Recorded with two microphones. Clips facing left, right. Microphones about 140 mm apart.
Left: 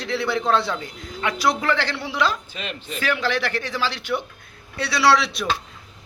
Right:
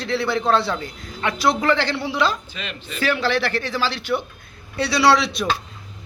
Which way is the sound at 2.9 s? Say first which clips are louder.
Right 3 dB; 35° right (ahead or behind).